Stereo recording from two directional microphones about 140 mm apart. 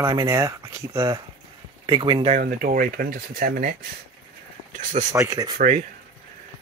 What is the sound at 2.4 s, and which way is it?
Speech, 85° right.